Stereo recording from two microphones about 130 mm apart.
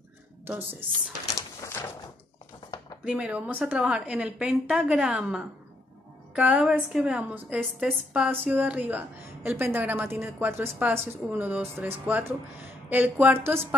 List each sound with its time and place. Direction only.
0.5 s a woman's voice: 15° right (ahead or behind)
1.6 s a sound: 20° left (ahead or behind)
3.1 s a woman's voice: 10° right (ahead or behind)